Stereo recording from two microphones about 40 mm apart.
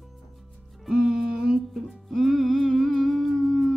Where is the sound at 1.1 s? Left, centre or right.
Centre.